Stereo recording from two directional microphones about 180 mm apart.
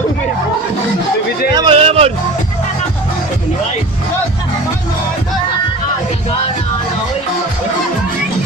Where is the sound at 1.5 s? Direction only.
30° right (ahead or behind).